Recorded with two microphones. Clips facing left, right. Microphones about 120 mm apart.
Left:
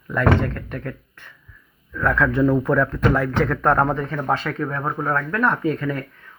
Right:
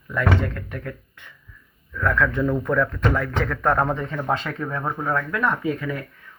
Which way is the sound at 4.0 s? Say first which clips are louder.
Left 2 dB; 20° right (ahead or behind).